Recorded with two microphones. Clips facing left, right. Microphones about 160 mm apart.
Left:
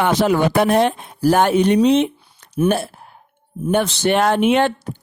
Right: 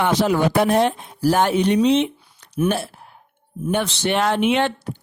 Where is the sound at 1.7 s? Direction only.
45° left (ahead or behind).